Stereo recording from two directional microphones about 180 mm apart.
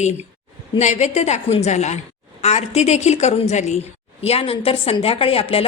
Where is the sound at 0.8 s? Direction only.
40° left (ahead or behind).